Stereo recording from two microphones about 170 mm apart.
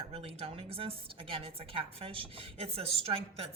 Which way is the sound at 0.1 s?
35° right (ahead or behind).